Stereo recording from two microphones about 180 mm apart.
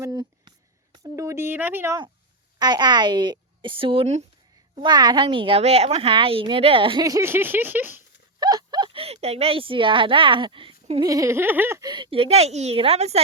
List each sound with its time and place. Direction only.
0.0 s a sound: 25° right (ahead or behind)
0.9 s speech: 20° right (ahead or behind)
2.6 s a woman's voice: 25° right (ahead or behind)
4.7 s a woman's voice: 25° right (ahead or behind); by 8.0 s 10° right (ahead or behind)
8.4 s speech: 20° right (ahead or behind)
11.0 s a woman's voice: 20° right (ahead or behind); by 13.1 s 35° right (ahead or behind)